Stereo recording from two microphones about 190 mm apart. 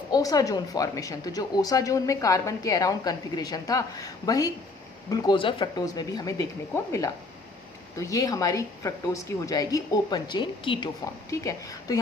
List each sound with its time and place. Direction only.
0.1 s speech: 20° left (ahead or behind)